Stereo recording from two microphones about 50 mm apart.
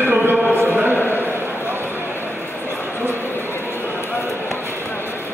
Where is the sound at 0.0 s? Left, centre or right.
Right.